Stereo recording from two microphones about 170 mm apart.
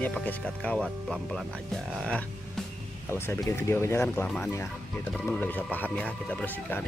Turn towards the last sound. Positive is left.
turn(degrees=10)  # may be behind; listen again after turning